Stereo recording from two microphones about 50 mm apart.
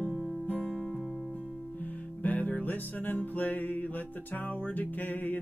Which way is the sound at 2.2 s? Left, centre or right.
Left.